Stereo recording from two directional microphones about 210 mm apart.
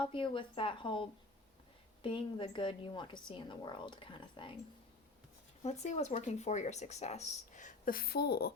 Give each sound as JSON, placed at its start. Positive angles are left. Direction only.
{"t": 0.0, "sound": "a woman's voice", "side_deg": 25}
{"t": 5.6, "sound": "speech", "side_deg": 30}